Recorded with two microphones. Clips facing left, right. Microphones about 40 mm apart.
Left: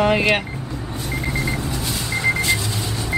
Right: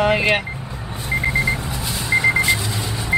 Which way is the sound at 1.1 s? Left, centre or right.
Right.